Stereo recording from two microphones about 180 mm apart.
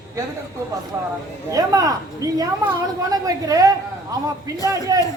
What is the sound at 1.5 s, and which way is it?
Speech, 20° right (ahead or behind).